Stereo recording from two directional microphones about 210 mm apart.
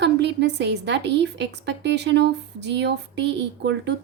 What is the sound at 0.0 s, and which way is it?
A woman's voice, 55° right (ahead or behind).